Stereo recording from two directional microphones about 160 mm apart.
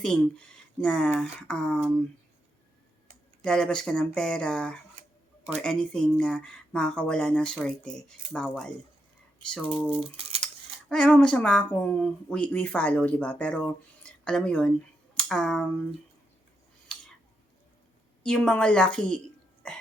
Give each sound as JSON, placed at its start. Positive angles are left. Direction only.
{"t": 0.0, "sound": "speech", "side_deg": 5}
{"t": 3.4, "sound": "speech", "side_deg": 5}
{"t": 10.0, "sound": "speech", "side_deg": -35}
{"t": 10.4, "sound": "speech", "side_deg": 5}
{"t": 16.9, "sound": "scissors", "side_deg": 5}
{"t": 18.2, "sound": "speech", "side_deg": 5}
{"t": 19.6, "sound": "burping", "side_deg": 5}